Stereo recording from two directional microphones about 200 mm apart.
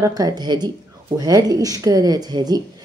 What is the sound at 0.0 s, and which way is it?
Speech, 20° right (ahead or behind).